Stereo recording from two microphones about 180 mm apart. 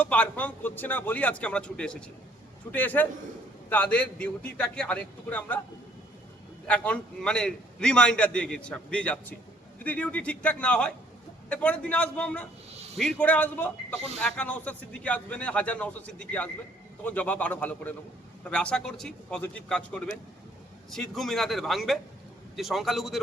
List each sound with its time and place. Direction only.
0.0 s a man's voice: 10° left (ahead or behind)
6.7 s a man's voice: 5° left (ahead or behind)
12.7 s a sound: 35° right (ahead or behind)
13.0 s a man's voice: 5° left (ahead or behind)